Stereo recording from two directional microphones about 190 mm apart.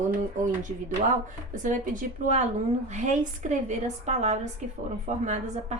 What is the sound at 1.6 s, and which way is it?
A woman's voice, 45° right (ahead or behind).